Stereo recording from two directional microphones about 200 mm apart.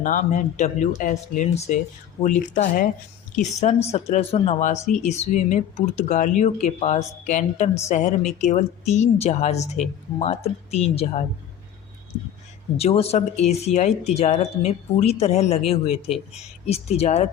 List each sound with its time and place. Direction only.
0.0 s speech: 40° left (ahead or behind)
12.7 s speech: 30° left (ahead or behind)